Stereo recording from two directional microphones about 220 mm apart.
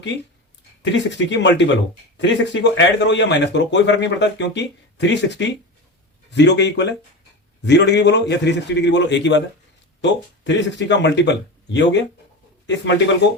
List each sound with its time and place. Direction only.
0.8 s a man's voice: 55° left (ahead or behind)